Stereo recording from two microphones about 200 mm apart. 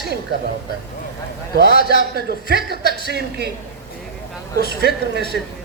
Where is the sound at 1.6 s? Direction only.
55° right (ahead or behind).